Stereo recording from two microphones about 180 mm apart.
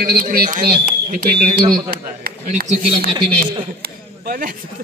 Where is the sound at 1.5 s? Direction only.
25° right (ahead or behind).